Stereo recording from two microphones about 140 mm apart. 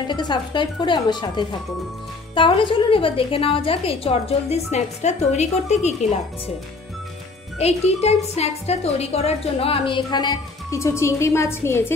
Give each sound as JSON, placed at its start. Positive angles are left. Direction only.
{"t": 0.1, "sound": "a woman's voice", "side_deg": 35}
{"t": 7.5, "sound": "speech", "side_deg": 50}